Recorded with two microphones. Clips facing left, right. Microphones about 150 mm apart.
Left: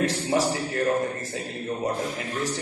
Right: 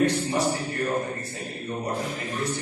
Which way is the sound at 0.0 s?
90° left.